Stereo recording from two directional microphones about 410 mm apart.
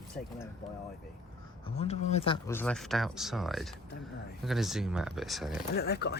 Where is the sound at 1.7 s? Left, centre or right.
Centre.